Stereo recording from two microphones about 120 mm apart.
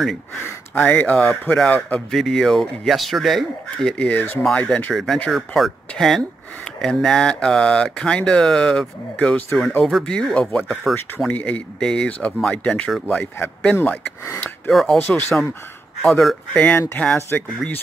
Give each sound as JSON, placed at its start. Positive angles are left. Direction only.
{"t": 0.7, "sound": "speech", "side_deg": 15}
{"t": 14.7, "sound": "speech", "side_deg": 0}
{"t": 15.0, "sound": "speech", "side_deg": 15}
{"t": 16.1, "sound": "speech", "side_deg": 0}